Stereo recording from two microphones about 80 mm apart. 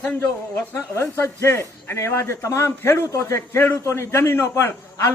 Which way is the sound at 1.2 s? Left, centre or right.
Left.